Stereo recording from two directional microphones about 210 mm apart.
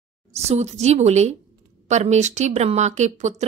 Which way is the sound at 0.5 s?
30° right (ahead or behind).